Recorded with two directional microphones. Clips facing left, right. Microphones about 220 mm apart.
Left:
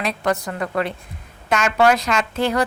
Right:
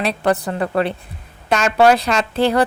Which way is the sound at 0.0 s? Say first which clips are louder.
Right 4 dB; 30° right (ahead or behind).